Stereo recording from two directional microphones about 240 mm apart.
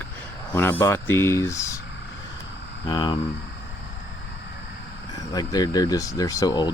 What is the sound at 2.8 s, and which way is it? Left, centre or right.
Speech, centre.